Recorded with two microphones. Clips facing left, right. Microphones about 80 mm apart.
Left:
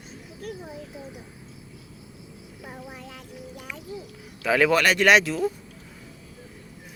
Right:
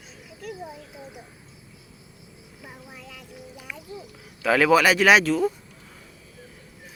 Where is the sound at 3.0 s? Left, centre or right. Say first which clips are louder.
Left 2 dB; left.